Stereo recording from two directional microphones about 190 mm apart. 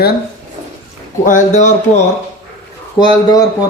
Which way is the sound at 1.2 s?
40° left (ahead or behind).